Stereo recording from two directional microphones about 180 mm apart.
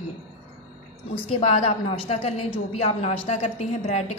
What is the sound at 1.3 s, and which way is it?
A woman's voice, 35° left (ahead or behind).